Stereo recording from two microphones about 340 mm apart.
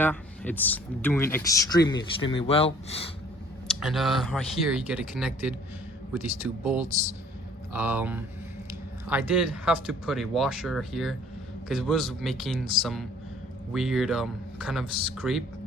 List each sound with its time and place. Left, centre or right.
0.0 s speech: centre
3.7 s speech: centre
6.7 s speech: centre